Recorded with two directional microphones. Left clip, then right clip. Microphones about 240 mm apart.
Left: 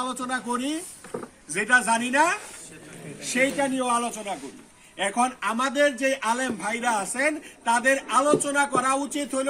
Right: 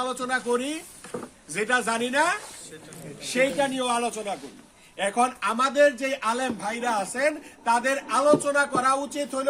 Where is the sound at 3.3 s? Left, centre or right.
Centre.